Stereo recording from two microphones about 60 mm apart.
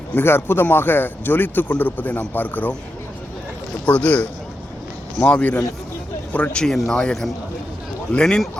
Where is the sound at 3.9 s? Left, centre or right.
Left.